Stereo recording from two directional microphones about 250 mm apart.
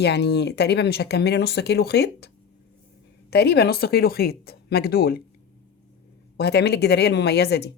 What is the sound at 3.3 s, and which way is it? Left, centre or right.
Speech, left.